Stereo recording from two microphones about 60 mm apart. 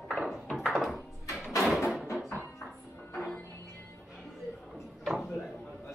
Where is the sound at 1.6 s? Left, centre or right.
Centre.